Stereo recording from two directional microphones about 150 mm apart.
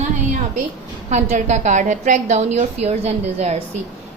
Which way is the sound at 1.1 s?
50° right (ahead or behind).